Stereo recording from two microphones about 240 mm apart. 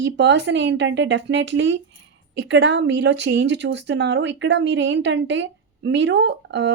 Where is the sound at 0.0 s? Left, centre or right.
Right.